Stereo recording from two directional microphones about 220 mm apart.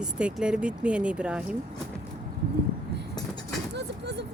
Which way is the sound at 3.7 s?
50° right (ahead or behind).